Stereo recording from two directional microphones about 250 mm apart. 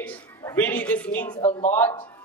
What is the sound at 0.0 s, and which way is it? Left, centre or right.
A woman's voice, centre.